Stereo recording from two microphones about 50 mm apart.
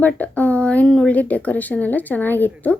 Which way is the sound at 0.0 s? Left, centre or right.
Left.